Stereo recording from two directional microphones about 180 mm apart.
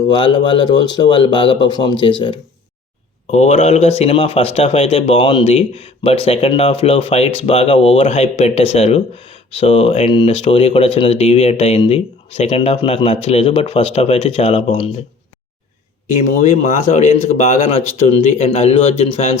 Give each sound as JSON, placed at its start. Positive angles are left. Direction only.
{"t": 0.1, "sound": "speech", "side_deg": 25}
{"t": 16.0, "sound": "speech", "side_deg": 40}